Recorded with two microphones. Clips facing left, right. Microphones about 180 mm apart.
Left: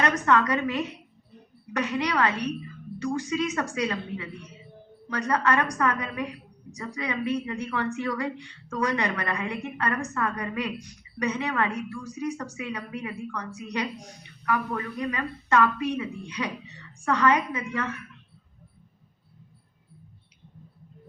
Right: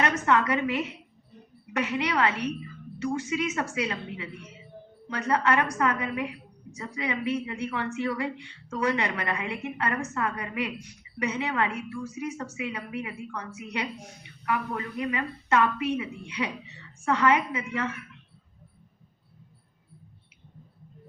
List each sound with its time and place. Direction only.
0.3 s a woman's voice: 25° right (ahead or behind)
14.4 s a woman's voice: 20° right (ahead or behind)